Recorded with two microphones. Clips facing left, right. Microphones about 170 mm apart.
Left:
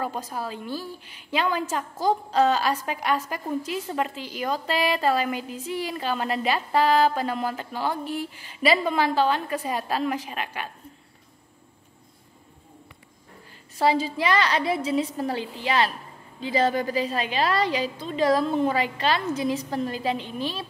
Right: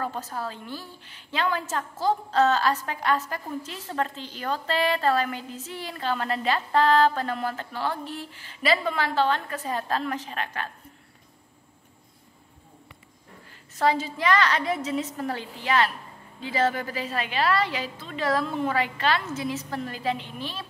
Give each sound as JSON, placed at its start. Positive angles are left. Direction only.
{"t": 0.0, "sound": "a woman's voice", "side_deg": 15}
{"t": 13.7, "sound": "a woman's voice", "side_deg": 10}